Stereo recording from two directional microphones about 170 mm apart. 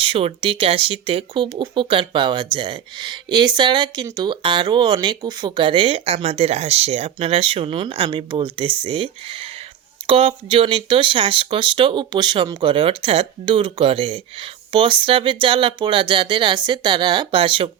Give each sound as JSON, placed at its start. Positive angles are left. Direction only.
{"t": 0.0, "sound": "speech", "side_deg": -30}